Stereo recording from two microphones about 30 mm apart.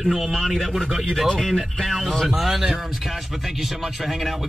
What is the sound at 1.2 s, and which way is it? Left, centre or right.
Speech, centre.